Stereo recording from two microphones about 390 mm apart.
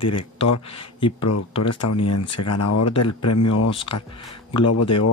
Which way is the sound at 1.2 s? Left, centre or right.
Left.